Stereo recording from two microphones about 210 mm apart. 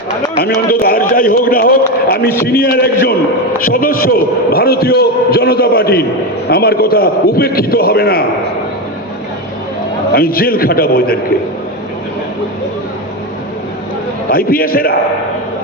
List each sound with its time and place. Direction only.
0.3 s a man's voice: 45° left (ahead or behind)
10.1 s a man's voice: 45° left (ahead or behind)
14.3 s a man's voice: 45° left (ahead or behind)